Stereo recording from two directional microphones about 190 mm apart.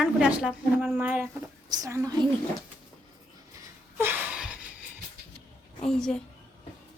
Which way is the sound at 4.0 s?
10° right (ahead or behind).